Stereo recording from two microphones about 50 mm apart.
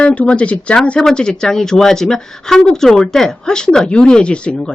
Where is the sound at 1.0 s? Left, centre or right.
Centre.